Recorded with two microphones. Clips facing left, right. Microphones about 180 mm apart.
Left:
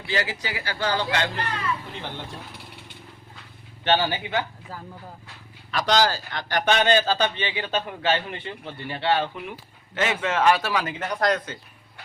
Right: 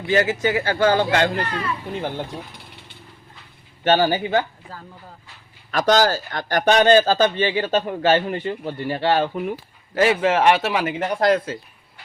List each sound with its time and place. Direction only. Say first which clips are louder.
0.1 s speech: right 9 dB; 50° right (ahead or behind)
3.8 s speech: right 5 dB; 45° right (ahead or behind)
5.7 s speech: right 4 dB; 45° right (ahead or behind); by 11.5 s 30° right (ahead or behind)